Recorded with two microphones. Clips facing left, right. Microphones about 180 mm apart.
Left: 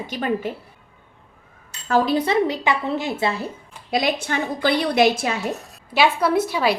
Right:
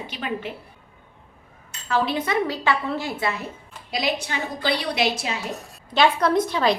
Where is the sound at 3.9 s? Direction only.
50° left (ahead or behind).